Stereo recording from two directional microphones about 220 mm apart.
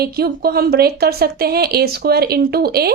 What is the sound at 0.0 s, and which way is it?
A woman's voice, 45° right (ahead or behind).